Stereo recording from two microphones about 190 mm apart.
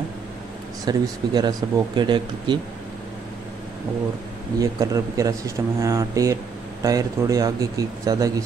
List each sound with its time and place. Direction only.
0.8 s speech: 20° right (ahead or behind)
4.6 s speech: 15° right (ahead or behind)